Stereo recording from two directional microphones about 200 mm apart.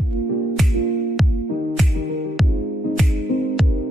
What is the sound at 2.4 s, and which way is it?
Music, centre (ahead or behind).